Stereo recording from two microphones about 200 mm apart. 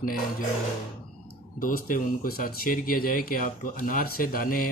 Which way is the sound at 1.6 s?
45° left (ahead or behind).